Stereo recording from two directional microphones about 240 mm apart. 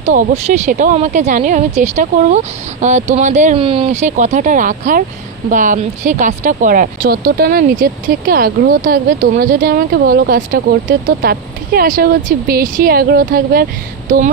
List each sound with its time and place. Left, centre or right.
0.0 s speech: right